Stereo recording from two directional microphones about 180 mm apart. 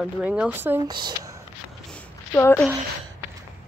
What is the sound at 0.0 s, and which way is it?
Speech, 5° right (ahead or behind).